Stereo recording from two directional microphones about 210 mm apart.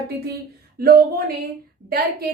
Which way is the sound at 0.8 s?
45° right (ahead or behind).